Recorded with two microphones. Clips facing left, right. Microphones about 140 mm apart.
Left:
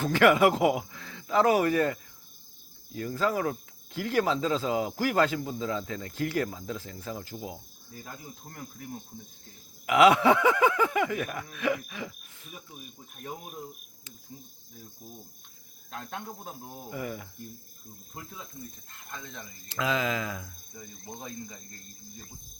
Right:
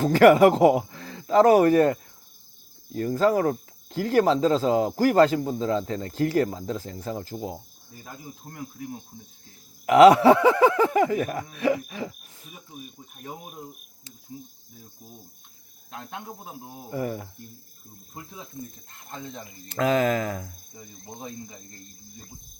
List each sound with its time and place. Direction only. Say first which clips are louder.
0.0 s speech: right 6 dB; 40° right (ahead or behind)
8.0 s cricket: right 4 dB; 10° right (ahead or behind)
9.8 s speech: right 7 dB; 40° right (ahead or behind)
11.5 s throat clearing: right 5 dB; 35° right (ahead or behind)
15.9 s cricket: right 1 dB; 15° right (ahead or behind)
16.9 s speech: right 7 dB; 35° right (ahead or behind)
19.0 s speech: right 5 dB; 30° right (ahead or behind)
19.6 s speech: right 7 dB; 45° right (ahead or behind)
20.7 s speech: right 1 dB; 25° right (ahead or behind)